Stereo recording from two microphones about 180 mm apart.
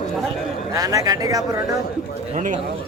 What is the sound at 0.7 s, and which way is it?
Speech, 20° right (ahead or behind).